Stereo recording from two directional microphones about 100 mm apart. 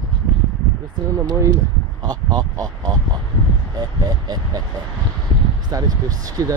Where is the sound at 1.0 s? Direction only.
35° right (ahead or behind).